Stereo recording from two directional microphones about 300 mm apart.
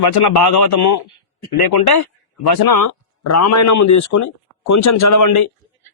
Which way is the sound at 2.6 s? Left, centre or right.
Left.